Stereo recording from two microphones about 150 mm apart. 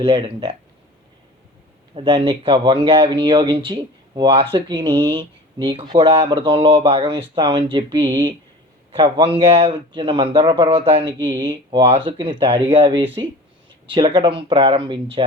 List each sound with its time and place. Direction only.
0.0 s speech: 35° right (ahead or behind)
2.0 s speech: 35° right (ahead or behind)